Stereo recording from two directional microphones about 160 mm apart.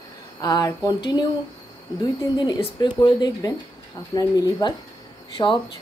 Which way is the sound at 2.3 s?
25° left (ahead or behind).